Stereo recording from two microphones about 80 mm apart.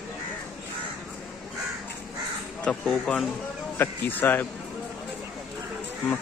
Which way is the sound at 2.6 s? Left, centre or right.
Centre.